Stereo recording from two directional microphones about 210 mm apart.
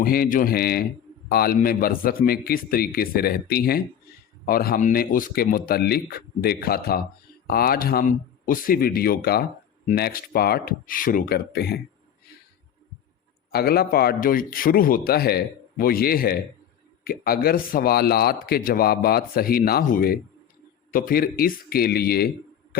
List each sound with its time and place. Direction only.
0.0 s a man's voice: 45° left (ahead or behind)
13.5 s a man's voice: 45° left (ahead or behind)